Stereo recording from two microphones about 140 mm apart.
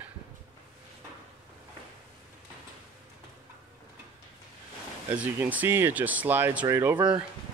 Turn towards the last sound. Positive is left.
turn(degrees=-20)  # may be behind; listen again after turning